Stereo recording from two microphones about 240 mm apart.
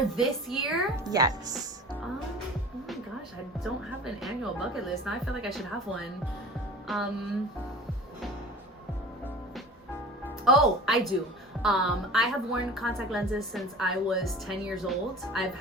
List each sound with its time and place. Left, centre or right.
0.2 s a woman's voice: centre
1.0 s a woman's voice: centre
3.6 s a woman's voice: centre
6.8 s music: centre
10.2 s a woman's voice: centre